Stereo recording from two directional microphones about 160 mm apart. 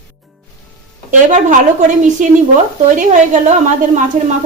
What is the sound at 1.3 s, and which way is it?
A woman's voice, 50° right (ahead or behind).